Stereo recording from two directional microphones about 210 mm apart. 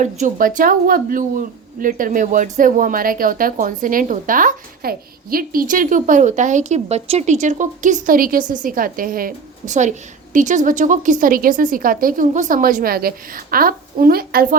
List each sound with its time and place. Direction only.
0.0 s speech: 40° right (ahead or behind)